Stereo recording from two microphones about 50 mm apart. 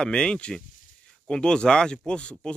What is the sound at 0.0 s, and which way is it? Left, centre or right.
Speech, centre.